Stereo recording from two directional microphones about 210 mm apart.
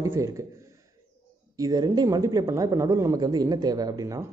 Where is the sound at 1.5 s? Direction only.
15° right (ahead or behind).